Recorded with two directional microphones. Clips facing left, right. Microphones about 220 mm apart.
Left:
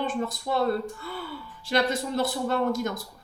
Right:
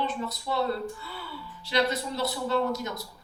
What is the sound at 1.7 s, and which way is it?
A woman's voice, 50° left (ahead or behind).